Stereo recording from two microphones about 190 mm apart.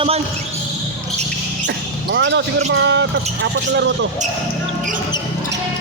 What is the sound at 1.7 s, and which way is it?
Basketball bounce, 65° right (ahead or behind).